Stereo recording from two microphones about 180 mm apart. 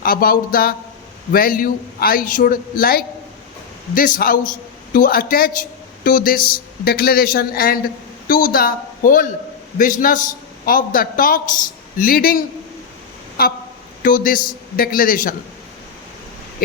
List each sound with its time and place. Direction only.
0.0 s a man's voice: 55° left (ahead or behind)
13.4 s a man's voice: 55° left (ahead or behind)